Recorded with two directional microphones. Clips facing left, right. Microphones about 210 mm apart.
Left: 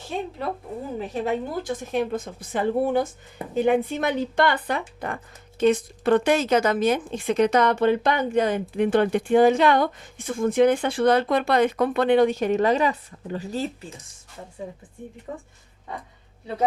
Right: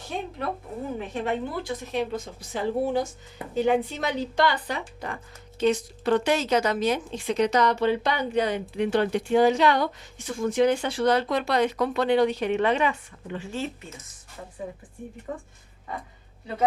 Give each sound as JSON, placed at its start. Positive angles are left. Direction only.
{"t": 0.9, "sound": "speech", "side_deg": 40}
{"t": 14.6, "sound": "speech", "side_deg": 25}